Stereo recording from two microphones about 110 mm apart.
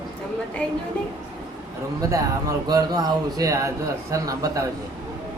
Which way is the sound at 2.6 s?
35° right (ahead or behind).